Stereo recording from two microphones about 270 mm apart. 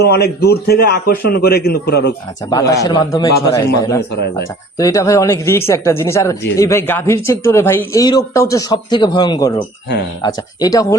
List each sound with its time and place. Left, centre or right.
0.0 s a man's voice: left
2.5 s speech: centre